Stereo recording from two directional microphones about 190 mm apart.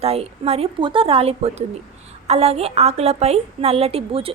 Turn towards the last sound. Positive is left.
turn(degrees=-30)  # may be behind; listen again after turning